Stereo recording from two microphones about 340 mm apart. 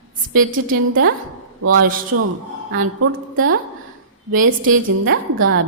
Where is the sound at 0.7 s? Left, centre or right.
Right.